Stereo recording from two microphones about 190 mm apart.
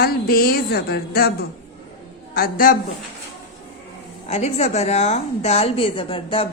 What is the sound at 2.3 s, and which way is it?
Speech, 50° left (ahead or behind).